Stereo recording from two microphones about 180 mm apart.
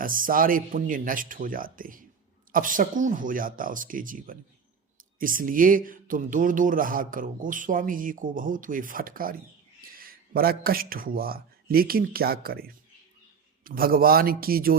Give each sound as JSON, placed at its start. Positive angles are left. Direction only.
{"t": 0.0, "sound": "a man's voice", "side_deg": -50}